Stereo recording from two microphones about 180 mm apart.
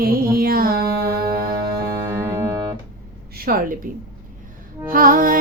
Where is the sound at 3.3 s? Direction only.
55° right (ahead or behind).